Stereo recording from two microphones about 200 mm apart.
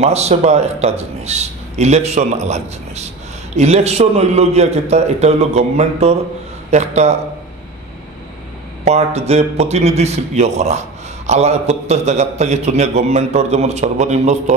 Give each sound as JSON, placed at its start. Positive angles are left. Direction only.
{"t": 0.0, "sound": "a man's voice", "side_deg": -30}
{"t": 8.8, "sound": "a man's voice", "side_deg": -30}